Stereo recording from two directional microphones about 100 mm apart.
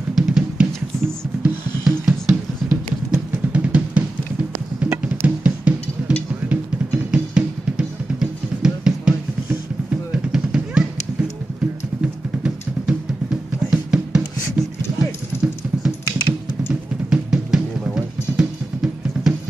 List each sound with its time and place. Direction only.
0.1 s music: 10° right (ahead or behind)
3.5 s drum: 15° right (ahead or behind)
4.7 s music: 25° right (ahead or behind); by 9.1 s 5° right (ahead or behind)
10.1 s drum: 10° right (ahead or behind)
12.0 s music: 10° right (ahead or behind)
15.0 s dog: 5° right (ahead or behind)
16.6 s music: 5° right (ahead or behind)